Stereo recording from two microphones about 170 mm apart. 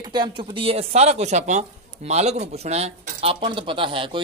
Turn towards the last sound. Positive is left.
turn(degrees=-30)  # may be behind; listen again after turning